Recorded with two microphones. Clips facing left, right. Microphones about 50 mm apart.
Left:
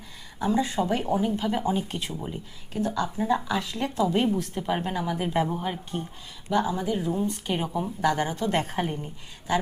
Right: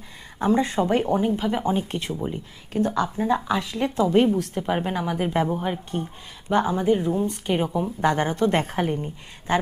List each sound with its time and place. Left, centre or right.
0.3 s a woman's voice: right
1.0 s speech: right
2.1 s a woman's voice: centre
2.7 s a woman's voice: right
3.2 s speech: right
4.5 s speech: centre
5.5 s a woman's voice: centre
6.5 s a woman's voice: right
7.7 s a woman's voice: centre
8.0 s a woman's voice: right